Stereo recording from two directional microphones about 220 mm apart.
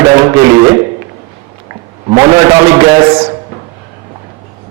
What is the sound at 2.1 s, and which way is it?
Speech, 15° right (ahead or behind).